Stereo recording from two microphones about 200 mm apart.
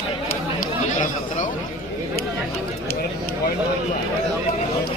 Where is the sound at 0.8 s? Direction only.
40° left (ahead or behind).